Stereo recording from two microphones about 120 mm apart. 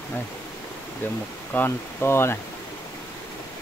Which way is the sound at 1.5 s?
15° left (ahead or behind).